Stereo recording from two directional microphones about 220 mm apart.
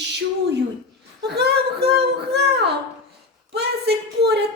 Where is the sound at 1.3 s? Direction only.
50° right (ahead or behind).